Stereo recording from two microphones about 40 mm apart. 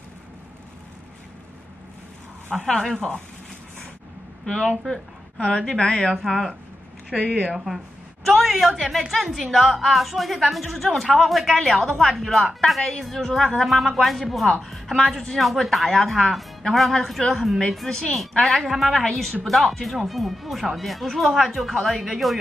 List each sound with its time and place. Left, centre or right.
2.6 s speech: centre
4.5 s speech: centre
5.4 s speech: left
6.1 s speech: centre
7.1 s speech: left
7.5 s a woman's voice: centre
17.8 s speech: centre
18.4 s speech: centre